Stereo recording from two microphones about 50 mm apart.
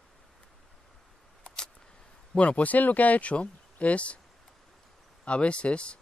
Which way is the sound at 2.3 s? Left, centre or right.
Left.